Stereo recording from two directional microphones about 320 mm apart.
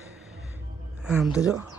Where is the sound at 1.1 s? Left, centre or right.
Centre.